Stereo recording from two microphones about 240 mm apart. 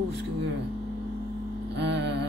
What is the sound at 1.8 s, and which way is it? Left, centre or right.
Speech, right.